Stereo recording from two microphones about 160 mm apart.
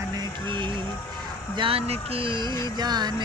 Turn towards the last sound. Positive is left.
turn(degrees=-25)  # may be behind; listen again after turning